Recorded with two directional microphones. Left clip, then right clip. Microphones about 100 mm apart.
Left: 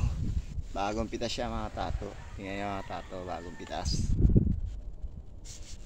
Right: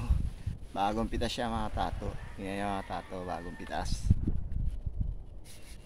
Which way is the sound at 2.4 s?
80° right.